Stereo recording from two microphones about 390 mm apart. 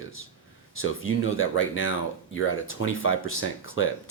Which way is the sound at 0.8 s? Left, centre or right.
Left.